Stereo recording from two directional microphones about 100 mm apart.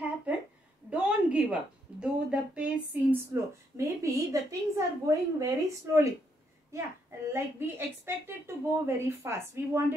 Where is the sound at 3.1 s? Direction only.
30° right (ahead or behind).